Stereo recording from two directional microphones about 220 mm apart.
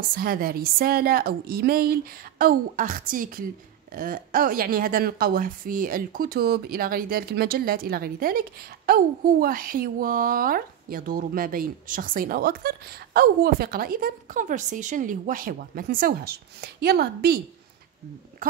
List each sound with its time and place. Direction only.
0.1 s a woman's voice: 40° right (ahead or behind)